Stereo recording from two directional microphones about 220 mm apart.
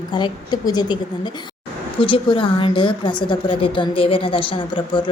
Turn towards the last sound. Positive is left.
turn(degrees=20)  # may be behind; listen again after turning